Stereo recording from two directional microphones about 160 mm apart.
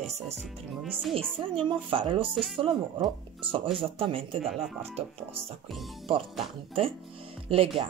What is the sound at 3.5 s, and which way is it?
Speech, 35° right (ahead or behind).